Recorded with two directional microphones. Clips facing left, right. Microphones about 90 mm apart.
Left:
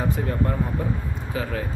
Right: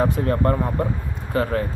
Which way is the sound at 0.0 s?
65° right (ahead or behind).